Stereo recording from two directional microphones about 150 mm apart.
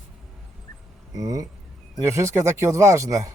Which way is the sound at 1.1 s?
20° right (ahead or behind).